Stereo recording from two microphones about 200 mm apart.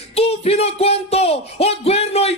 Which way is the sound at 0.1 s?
30° left (ahead or behind).